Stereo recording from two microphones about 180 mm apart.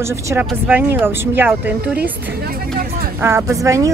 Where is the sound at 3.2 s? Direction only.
15° right (ahead or behind).